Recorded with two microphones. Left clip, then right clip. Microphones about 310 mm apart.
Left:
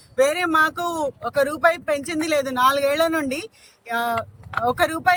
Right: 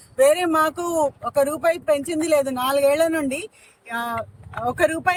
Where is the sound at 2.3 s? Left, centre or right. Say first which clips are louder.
Left 2 dB; centre.